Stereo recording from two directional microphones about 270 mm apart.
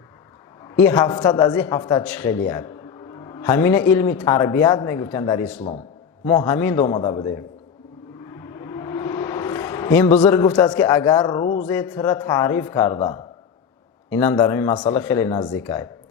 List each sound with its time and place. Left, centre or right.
0.8 s a man's voice: centre
8.5 s a sound: centre
10.2 s a man's voice: centre